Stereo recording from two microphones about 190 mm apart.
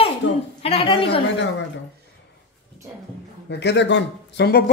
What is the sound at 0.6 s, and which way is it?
Speech, 30° left (ahead or behind).